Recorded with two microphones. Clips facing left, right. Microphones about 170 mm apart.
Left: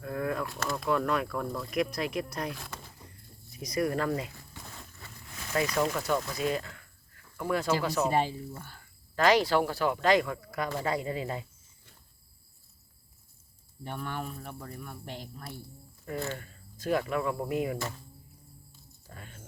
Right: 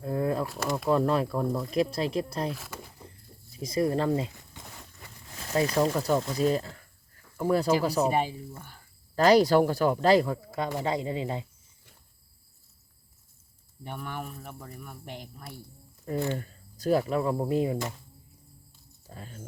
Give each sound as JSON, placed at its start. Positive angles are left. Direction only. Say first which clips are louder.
{"t": 0.0, "sound": "a sound", "louder": "right 4 dB", "side_deg": -30}
{"t": 0.4, "sound": "speech", "louder": "right 3 dB", "side_deg": -5}
{"t": 0.9, "sound": "speech", "louder": "right 4 dB", "side_deg": -30}
{"t": 2.5, "sound": "speech", "louder": "right 3 dB", "side_deg": -5}
{"t": 3.5, "sound": "speech", "louder": "right 3 dB", "side_deg": -25}
{"t": 5.3, "sound": "speech", "louder": "right 3 dB", "side_deg": -30}
{"t": 8.1, "sound": "speech", "louder": "even", "side_deg": -10}
{"t": 9.1, "sound": "speech", "louder": "right 4 dB", "side_deg": -40}
{"t": 13.8, "sound": "speech", "louder": "left 1 dB", "side_deg": -15}
{"t": 16.4, "sound": "speech", "louder": "right 5 dB", "side_deg": -40}
{"t": 19.1, "sound": "speech", "louder": "right 4 dB", "side_deg": -35}